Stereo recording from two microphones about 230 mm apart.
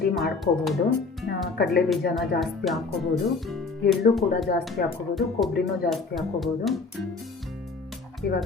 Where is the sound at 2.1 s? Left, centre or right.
Centre.